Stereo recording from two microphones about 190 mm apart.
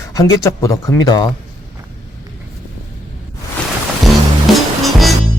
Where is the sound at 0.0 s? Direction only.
15° left (ahead or behind).